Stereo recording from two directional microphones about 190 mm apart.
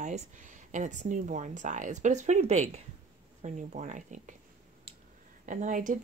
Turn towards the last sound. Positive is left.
turn(degrees=-45)  # may be behind; listen again after turning